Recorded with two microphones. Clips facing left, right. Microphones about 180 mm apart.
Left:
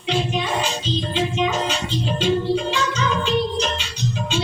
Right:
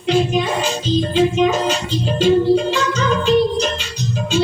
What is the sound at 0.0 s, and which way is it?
Music, 45° right (ahead or behind).